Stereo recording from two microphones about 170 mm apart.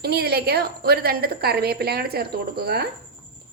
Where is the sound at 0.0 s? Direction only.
70° right (ahead or behind).